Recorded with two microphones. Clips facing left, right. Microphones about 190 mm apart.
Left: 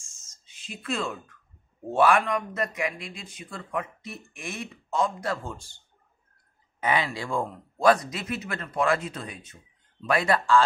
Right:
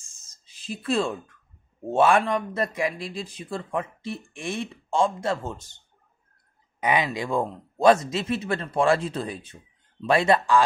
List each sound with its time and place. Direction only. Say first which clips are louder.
0.3 s speech: right 7 dB; 35° right (ahead or behind)
6.8 s speech: right 3 dB; 20° right (ahead or behind)